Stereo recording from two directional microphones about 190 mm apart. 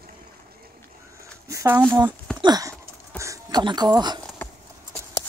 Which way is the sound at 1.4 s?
15° right (ahead or behind).